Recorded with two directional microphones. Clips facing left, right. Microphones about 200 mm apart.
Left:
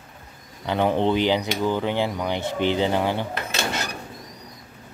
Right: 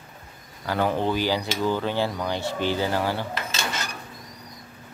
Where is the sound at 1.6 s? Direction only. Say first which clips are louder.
Left 1 dB; 15° left (ahead or behind).